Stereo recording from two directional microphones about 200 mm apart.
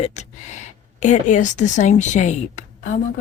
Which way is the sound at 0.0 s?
35° left (ahead or behind).